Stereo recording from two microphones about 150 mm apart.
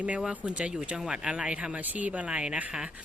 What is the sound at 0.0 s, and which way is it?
Speech, 10° right (ahead or behind).